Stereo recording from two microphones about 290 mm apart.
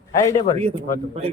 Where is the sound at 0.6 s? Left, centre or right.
Centre.